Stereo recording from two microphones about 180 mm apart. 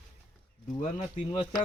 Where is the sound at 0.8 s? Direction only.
35° left (ahead or behind).